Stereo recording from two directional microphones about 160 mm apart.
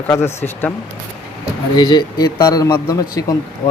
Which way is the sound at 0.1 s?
15° left (ahead or behind).